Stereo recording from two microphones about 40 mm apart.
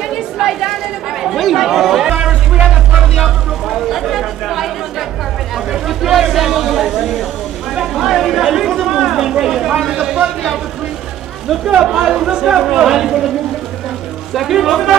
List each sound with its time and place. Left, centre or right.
0.1 s chatter: centre
3.2 s a sound: centre
5.7 s speech: centre
7.9 s chatter: centre
9.4 s a sound: centre
11.6 s speech: centre
12.3 s speech: centre
12.8 s speech: centre
14.5 s speech: centre